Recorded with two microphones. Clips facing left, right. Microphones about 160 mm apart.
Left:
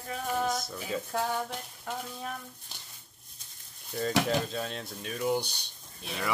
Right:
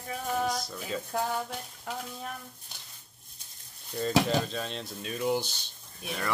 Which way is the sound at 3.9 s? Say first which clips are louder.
Right 2 dB; 5° left (ahead or behind).